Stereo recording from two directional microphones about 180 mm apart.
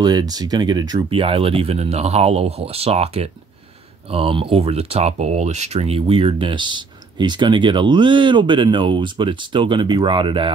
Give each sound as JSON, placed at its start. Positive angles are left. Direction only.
{"t": 0.0, "sound": "speech", "side_deg": -20}